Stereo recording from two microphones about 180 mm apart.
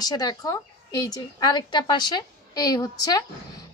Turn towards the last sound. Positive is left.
turn(degrees=20)  # may be behind; listen again after turning